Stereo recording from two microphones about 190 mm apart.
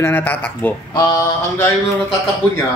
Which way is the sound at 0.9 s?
20° left (ahead or behind).